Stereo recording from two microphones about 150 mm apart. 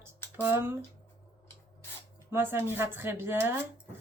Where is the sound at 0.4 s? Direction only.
15° right (ahead or behind).